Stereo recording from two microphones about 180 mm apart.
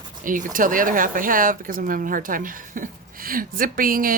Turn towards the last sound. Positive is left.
turn(degrees=-50)  # may be behind; listen again after turning